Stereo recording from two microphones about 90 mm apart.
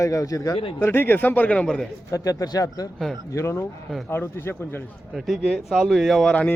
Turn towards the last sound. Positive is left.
turn(degrees=0)  # may be behind; listen again after turning